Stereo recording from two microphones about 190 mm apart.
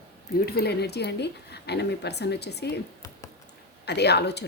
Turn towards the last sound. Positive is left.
turn(degrees=60)  # may be behind; listen again after turning